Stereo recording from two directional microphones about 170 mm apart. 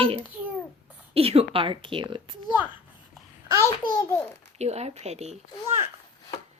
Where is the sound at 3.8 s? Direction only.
25° left (ahead or behind).